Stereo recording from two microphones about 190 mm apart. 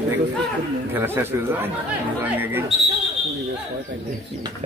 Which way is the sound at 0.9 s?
10° right (ahead or behind).